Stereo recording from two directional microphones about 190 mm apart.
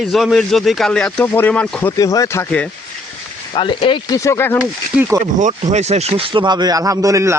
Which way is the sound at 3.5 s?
25° left (ahead or behind).